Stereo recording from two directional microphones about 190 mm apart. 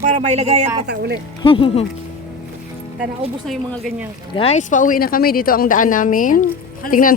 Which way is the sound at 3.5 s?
Centre (ahead or behind).